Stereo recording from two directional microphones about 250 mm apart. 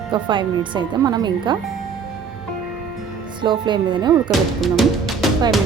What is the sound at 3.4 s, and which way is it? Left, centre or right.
Speech, centre.